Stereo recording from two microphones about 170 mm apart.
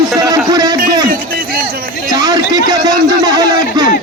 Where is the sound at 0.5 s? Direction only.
20° right (ahead or behind).